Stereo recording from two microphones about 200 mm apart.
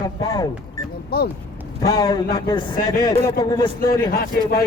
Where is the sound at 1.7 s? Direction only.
20° left (ahead or behind).